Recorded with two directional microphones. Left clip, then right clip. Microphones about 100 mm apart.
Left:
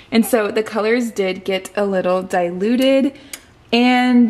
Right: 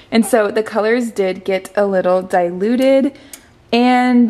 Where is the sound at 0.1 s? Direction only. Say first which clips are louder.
Right 3 dB; 20° right (ahead or behind).